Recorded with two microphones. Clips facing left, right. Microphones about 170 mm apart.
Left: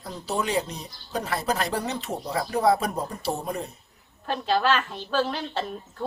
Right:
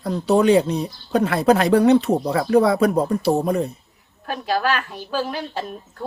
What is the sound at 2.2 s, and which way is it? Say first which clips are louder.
Speech: right 7 dB; 85° right.